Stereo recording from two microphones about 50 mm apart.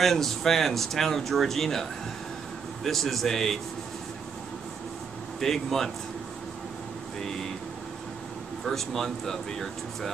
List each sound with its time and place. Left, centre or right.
0.0 s speech: centre
5.4 s speech: centre
8.6 s speech: centre